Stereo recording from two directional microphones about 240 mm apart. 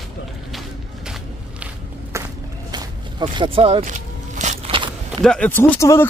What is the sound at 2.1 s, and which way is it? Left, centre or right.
Walk, centre.